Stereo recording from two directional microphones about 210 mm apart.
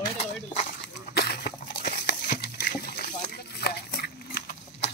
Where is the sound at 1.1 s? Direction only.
50° left (ahead or behind).